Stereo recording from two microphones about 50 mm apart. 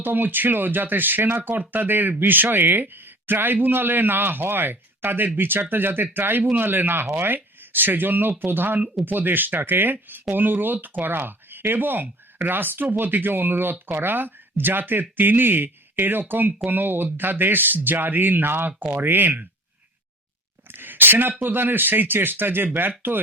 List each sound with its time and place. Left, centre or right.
0.0 s speech: right
20.7 s speech: right